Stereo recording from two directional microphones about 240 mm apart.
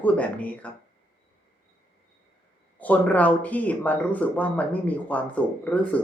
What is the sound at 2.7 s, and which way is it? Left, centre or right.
Speech, centre.